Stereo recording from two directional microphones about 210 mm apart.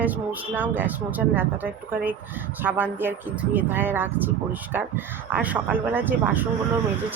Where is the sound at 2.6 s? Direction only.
10° right (ahead or behind).